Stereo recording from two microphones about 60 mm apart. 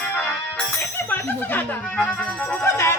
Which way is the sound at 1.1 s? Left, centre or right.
Left.